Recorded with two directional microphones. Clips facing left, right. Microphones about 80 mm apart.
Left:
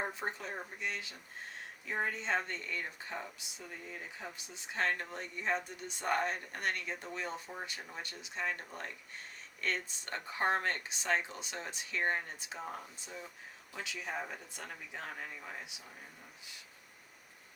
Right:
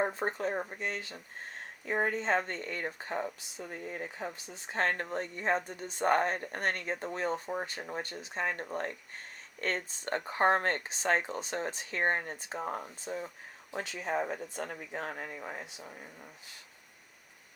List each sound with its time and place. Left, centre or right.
0.0 s speech: right